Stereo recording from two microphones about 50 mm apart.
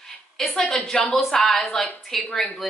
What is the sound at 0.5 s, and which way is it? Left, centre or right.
A woman's voice, centre.